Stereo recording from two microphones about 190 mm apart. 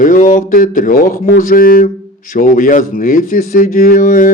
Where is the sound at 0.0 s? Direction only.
45° left (ahead or behind).